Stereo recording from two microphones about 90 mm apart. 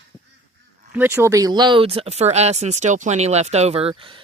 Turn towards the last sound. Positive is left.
turn(degrees=-90)